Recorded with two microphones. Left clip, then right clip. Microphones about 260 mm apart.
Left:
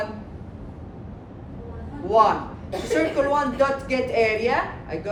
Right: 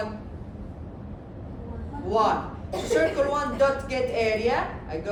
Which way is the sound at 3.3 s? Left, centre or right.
Left.